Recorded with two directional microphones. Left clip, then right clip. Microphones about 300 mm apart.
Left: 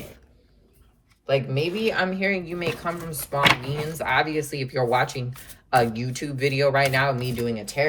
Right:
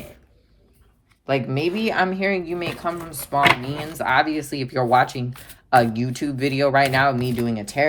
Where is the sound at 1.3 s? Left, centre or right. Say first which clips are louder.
Right 1 dB; centre.